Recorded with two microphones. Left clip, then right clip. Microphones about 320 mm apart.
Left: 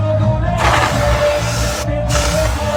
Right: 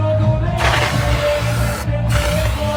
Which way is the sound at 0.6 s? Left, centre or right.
Left.